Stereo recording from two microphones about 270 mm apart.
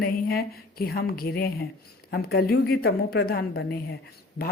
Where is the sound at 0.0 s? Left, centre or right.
Left.